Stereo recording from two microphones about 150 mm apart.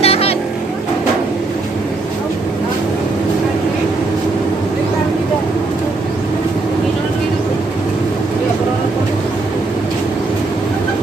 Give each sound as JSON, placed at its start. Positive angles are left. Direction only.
{"t": 0.0, "sound": "vehicle", "side_deg": 40}